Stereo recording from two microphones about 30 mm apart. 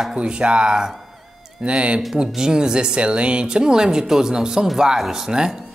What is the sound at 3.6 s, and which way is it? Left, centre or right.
Speech, right.